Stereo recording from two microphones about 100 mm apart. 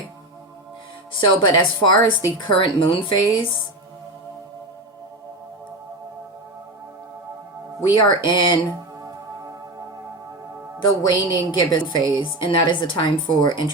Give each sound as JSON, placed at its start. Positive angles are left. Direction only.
{"t": 1.4, "sound": "speech", "side_deg": 50}
{"t": 7.9, "sound": "speech", "side_deg": 50}
{"t": 10.8, "sound": "speech", "side_deg": 45}